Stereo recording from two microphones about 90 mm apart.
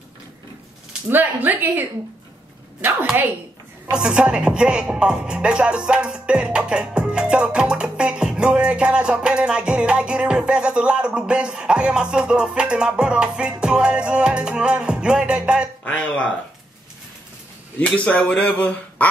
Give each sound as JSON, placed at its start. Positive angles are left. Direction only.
{"t": 1.0, "sound": "speech", "side_deg": -20}
{"t": 3.9, "sound": "speech", "side_deg": -10}
{"t": 15.8, "sound": "speech", "side_deg": 15}
{"t": 17.7, "sound": "speech", "side_deg": 15}